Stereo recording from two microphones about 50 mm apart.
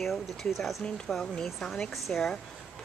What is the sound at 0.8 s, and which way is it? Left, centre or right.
Speech, centre.